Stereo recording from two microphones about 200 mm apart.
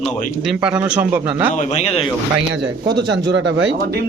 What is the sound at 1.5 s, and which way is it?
Speech, 35° left (ahead or behind).